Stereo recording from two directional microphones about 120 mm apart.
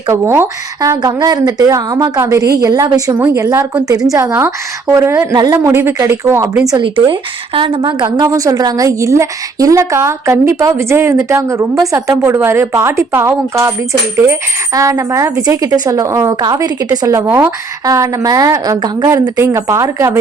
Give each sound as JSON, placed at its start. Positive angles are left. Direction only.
{"t": 0.1, "sound": "a woman's voice", "side_deg": -25}
{"t": 3.2, "sound": "a woman's voice", "side_deg": -20}
{"t": 6.7, "sound": "a woman's voice", "side_deg": -40}
{"t": 17.2, "sound": "a woman's voice", "side_deg": -20}
{"t": 19.0, "sound": "a woman's voice", "side_deg": -25}